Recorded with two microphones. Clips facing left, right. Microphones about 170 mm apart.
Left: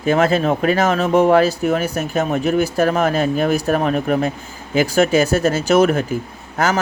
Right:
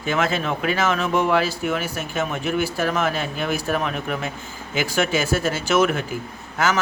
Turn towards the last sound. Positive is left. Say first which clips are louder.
# left 3 dB
turn(degrees=40)  # may be behind; listen again after turning